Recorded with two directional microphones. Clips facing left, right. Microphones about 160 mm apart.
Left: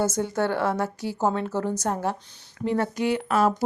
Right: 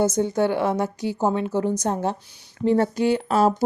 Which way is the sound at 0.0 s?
20° right (ahead or behind).